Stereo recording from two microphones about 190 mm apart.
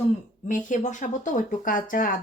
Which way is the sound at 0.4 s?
40° left (ahead or behind).